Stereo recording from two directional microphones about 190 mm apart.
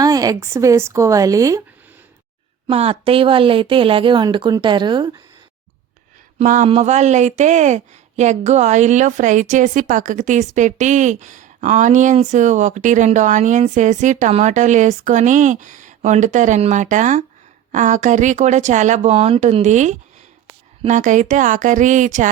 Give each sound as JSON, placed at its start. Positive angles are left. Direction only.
{"t": 0.0, "sound": "speech", "side_deg": -20}
{"t": 2.6, "sound": "speech", "side_deg": -30}
{"t": 6.4, "sound": "speech", "side_deg": -40}